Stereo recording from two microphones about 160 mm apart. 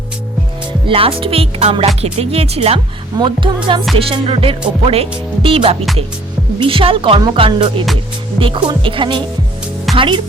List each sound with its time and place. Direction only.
0.9 s speech: 35° right (ahead or behind)